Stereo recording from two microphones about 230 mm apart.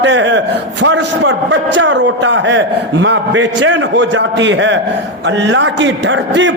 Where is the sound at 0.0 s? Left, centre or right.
Right.